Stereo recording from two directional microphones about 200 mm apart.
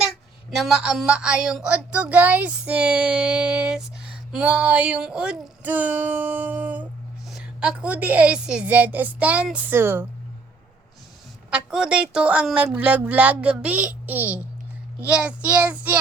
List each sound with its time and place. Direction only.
0.5 s a woman's voice: centre (ahead or behind)
11.5 s a woman's voice: 5° right (ahead or behind)